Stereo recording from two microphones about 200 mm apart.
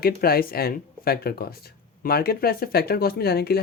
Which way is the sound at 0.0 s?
50° left (ahead or behind).